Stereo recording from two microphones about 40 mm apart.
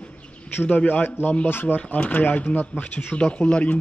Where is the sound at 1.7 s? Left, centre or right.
Left.